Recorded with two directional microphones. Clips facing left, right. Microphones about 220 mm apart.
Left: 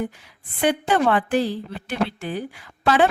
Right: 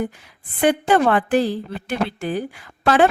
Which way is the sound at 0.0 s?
50° right (ahead or behind).